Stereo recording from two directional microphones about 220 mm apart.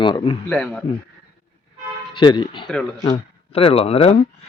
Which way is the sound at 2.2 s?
20° left (ahead or behind).